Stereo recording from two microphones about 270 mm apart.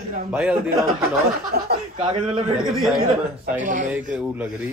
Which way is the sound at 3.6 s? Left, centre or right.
Right.